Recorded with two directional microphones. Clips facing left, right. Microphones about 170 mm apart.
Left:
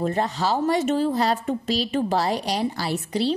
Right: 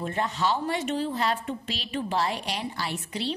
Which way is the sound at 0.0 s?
35° left (ahead or behind).